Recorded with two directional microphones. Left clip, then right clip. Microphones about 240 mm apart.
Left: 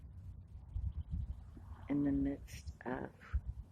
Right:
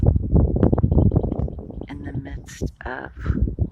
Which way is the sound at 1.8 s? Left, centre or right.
Centre.